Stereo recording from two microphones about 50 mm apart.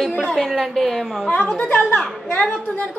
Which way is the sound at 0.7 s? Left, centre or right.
Centre.